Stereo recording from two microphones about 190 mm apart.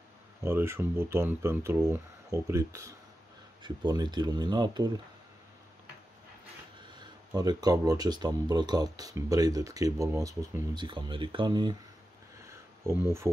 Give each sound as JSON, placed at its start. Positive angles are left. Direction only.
{"t": 0.4, "sound": "speech", "side_deg": -15}
{"t": 7.0, "sound": "speech", "side_deg": -20}
{"t": 12.9, "sound": "speech", "side_deg": -15}